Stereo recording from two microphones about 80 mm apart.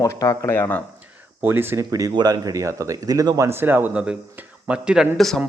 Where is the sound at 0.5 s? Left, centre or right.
Left.